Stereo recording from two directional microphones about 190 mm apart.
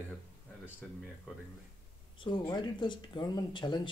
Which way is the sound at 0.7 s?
10° left (ahead or behind).